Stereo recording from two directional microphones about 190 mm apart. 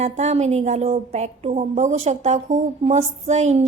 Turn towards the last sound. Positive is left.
turn(degrees=-35)  # may be behind; listen again after turning